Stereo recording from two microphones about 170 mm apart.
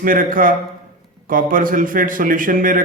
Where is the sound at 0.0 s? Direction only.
55° right (ahead or behind).